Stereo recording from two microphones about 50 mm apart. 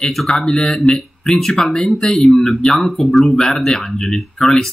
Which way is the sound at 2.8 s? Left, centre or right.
Centre.